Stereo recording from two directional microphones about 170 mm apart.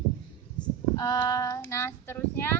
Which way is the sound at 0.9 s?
20° left (ahead or behind).